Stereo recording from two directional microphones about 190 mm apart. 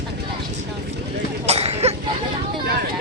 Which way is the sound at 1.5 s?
35° right (ahead or behind).